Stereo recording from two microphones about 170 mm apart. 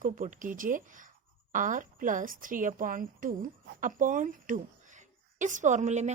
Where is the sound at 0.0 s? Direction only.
50° right (ahead or behind).